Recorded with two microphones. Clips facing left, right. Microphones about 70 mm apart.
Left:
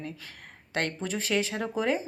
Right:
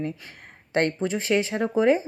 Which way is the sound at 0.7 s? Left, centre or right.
Right.